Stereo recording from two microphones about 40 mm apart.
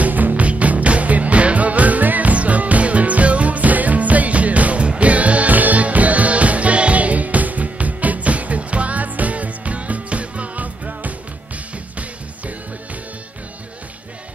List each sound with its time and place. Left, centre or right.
0.0 s music: right